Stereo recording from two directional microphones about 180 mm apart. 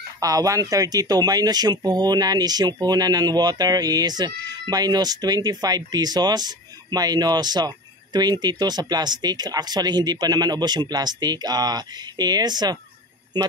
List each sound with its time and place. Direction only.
0.2 s speech: 20° right (ahead or behind)